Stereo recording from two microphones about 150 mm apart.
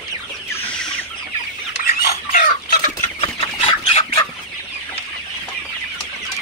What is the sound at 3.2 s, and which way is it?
Chicken, 35° left (ahead or behind).